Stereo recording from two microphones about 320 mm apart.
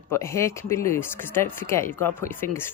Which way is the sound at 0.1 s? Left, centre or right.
Centre.